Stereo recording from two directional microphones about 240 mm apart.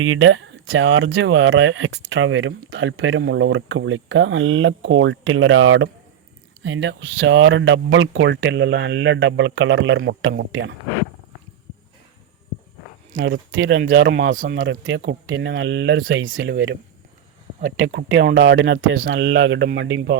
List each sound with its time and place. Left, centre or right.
0.0 s speech: right
13.1 s speech: right
13.5 s speech: right
17.7 s speech: right